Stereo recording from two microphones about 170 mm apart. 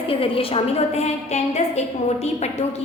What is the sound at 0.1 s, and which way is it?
A woman's voice, 35° left (ahead or behind).